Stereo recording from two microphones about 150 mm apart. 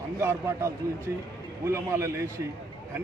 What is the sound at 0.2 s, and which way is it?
A man's voice, 20° right (ahead or behind).